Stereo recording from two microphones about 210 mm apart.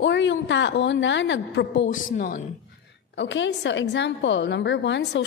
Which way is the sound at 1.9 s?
40° left (ahead or behind).